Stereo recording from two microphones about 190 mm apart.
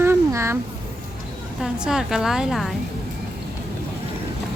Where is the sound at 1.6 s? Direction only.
5° right (ahead or behind).